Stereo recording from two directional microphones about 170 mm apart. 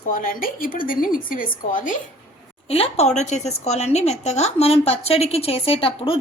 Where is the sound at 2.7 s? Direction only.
35° left (ahead or behind).